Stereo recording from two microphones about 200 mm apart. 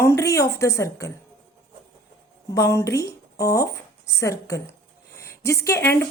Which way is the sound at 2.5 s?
15° left (ahead or behind).